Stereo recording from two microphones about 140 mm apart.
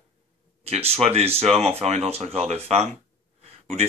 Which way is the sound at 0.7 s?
45° right (ahead or behind).